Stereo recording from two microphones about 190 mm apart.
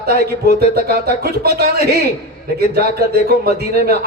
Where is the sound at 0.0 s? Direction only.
55° right (ahead or behind).